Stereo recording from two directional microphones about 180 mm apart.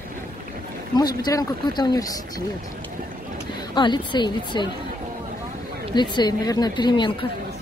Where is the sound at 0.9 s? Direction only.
20° left (ahead or behind).